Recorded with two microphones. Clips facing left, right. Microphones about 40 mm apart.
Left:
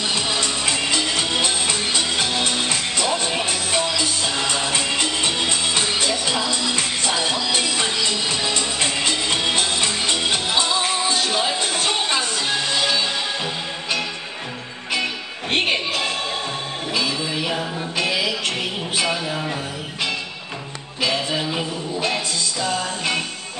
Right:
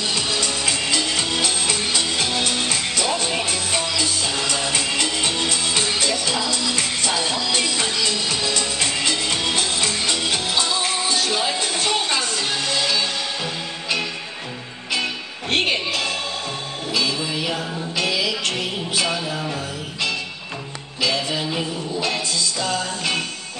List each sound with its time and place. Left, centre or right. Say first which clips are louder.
0.1 s music: left 1 dB; left
1.7 s music: even; centre
7.7 s music: left 1 dB; centre
15.5 s music: even; left
19.0 s a sound: left 1 dB; centre
21.0 s music: even; left
21.5 s a sound: even; centre